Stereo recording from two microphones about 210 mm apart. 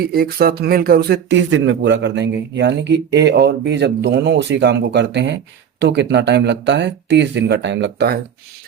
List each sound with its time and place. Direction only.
0.0 s speech: 45° right (ahead or behind)